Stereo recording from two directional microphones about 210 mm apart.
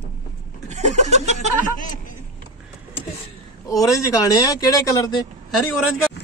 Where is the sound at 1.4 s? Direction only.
40° left (ahead or behind).